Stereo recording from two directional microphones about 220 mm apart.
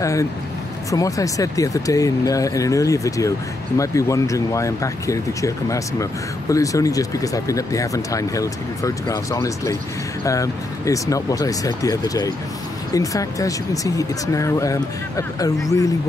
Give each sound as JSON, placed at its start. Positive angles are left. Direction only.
{"t": 0.0, "sound": "speech", "side_deg": 15}